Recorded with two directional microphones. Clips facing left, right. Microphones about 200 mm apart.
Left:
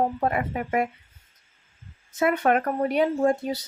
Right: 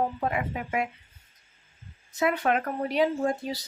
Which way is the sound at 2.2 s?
55° left (ahead or behind).